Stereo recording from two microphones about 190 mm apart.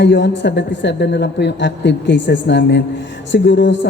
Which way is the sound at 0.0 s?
70° left (ahead or behind).